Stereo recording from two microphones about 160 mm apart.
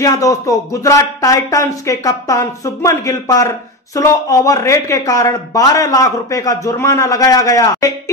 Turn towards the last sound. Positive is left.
turn(degrees=20)  # may be behind; listen again after turning